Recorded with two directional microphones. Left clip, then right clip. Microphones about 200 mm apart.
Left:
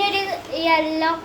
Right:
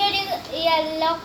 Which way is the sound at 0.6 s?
20° left (ahead or behind).